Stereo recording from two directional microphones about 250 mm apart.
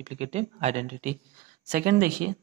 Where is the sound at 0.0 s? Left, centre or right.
Right.